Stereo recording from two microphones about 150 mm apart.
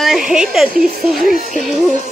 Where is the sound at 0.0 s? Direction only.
Centre (ahead or behind).